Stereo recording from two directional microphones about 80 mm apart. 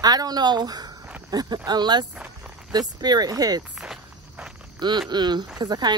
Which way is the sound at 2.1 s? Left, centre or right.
Centre.